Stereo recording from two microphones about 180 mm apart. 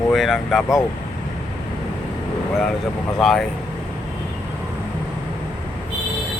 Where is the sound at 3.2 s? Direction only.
Centre (ahead or behind).